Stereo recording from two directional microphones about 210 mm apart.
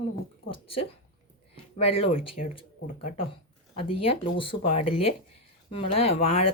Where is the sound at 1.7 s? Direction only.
25° left (ahead or behind).